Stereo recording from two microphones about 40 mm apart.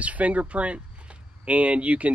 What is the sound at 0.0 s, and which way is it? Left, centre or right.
Speech, right.